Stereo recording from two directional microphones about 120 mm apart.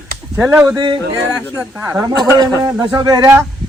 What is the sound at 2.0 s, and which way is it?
A man's voice, 35° right (ahead or behind).